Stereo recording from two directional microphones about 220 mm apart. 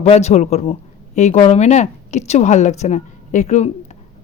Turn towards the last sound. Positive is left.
turn(degrees=30)  # may be behind; listen again after turning